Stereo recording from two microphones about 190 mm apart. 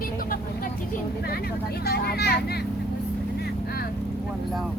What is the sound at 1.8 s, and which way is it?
Speech, 55° left (ahead or behind).